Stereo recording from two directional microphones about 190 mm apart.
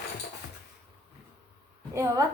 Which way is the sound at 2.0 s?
15° right (ahead or behind).